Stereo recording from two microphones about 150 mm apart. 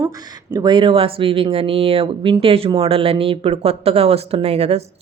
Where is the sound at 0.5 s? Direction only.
30° right (ahead or behind).